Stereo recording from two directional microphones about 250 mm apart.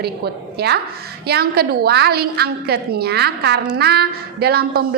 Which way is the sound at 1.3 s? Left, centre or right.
Right.